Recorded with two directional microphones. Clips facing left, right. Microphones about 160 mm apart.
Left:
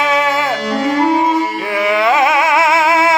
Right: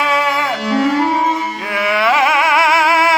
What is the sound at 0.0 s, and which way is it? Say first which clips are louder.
Music: left 2 dB; 20° left (ahead or behind).